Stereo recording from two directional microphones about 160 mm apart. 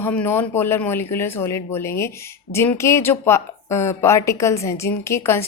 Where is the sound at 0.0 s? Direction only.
15° left (ahead or behind).